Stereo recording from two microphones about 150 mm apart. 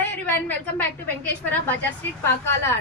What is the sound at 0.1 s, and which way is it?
A woman's voice, 10° left (ahead or behind).